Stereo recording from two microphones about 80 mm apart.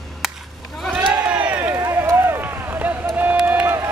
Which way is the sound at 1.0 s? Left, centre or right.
Centre.